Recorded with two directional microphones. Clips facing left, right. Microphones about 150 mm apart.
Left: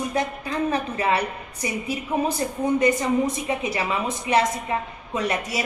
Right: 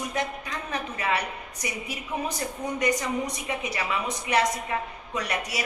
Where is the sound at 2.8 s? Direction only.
25° left (ahead or behind).